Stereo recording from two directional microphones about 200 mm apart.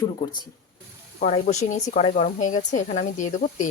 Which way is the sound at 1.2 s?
35° left (ahead or behind).